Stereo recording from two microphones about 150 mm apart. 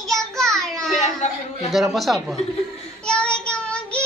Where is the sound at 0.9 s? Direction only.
55° left (ahead or behind).